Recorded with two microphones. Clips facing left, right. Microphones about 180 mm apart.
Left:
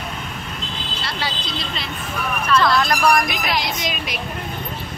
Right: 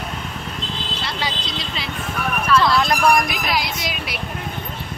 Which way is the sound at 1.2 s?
10° right (ahead or behind).